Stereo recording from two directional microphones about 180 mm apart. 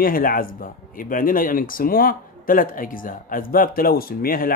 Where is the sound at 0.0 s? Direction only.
50° left (ahead or behind).